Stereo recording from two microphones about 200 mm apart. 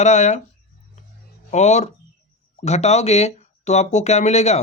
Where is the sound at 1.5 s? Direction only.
35° left (ahead or behind).